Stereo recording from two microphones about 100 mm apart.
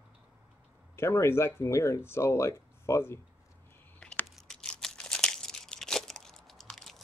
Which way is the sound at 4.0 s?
10° left (ahead or behind).